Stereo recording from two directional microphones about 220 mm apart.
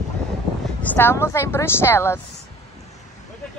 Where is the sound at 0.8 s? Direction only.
10° left (ahead or behind).